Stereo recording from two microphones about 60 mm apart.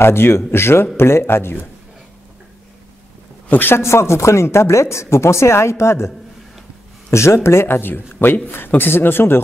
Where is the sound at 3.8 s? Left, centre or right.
Left.